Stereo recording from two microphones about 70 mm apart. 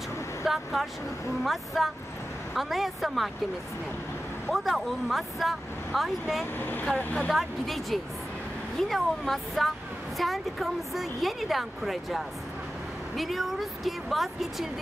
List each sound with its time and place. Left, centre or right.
0.5 s a woman's voice: centre
4.5 s a woman's voice: centre
6.6 s speech: left
7.3 s a woman's voice: centre